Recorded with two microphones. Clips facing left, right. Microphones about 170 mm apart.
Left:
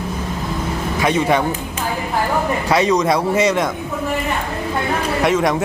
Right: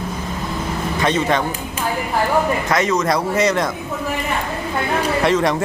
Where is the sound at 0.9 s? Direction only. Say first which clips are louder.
Left 2 dB; 10° left (ahead or behind).